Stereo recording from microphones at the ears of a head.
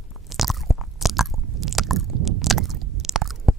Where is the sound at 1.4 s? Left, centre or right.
Right.